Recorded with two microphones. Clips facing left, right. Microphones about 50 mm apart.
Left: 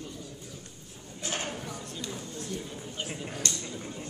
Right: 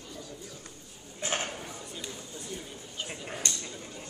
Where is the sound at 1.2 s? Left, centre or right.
Right.